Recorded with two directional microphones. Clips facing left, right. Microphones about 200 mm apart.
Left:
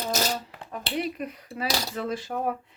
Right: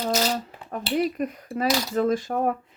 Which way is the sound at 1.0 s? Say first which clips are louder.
Right 5 dB; 45° right (ahead or behind).